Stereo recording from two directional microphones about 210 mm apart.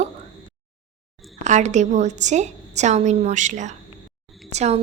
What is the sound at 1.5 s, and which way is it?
A woman's voice, 35° right (ahead or behind).